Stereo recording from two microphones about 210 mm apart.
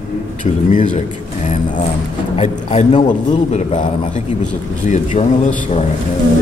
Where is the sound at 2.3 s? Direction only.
30° left (ahead or behind).